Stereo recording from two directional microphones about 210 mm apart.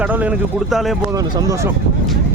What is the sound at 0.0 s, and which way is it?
Speech, 5° right (ahead or behind).